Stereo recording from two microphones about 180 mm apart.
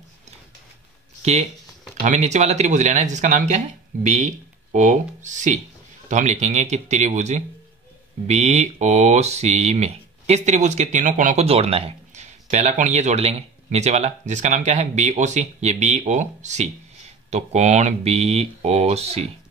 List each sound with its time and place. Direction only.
2.0 s speech: 40° right (ahead or behind)